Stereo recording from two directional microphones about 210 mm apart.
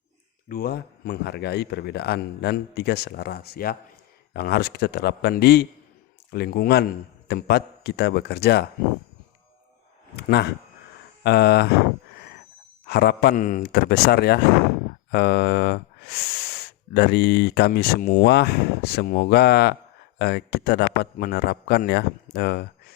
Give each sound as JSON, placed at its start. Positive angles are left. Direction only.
{"t": 0.4, "sound": "speech", "side_deg": 45}
{"t": 11.2, "sound": "a sound", "side_deg": 50}
{"t": 12.8, "sound": "speech", "side_deg": 50}